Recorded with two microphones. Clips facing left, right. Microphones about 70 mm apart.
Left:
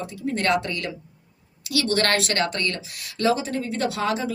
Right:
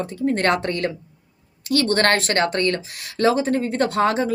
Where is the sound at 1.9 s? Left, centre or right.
Right.